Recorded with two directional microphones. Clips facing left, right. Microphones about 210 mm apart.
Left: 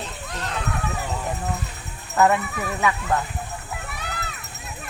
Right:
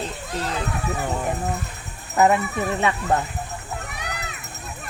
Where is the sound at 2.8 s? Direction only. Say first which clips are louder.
Left 2 dB; 25° right (ahead or behind).